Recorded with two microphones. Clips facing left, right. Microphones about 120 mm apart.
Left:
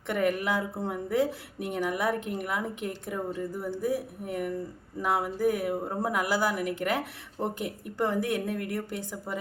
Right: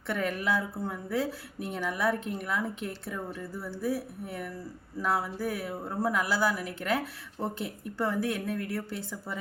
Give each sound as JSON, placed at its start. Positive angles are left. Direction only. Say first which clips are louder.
{"t": 0.1, "sound": "speech", "louder": "left 3 dB", "side_deg": 15}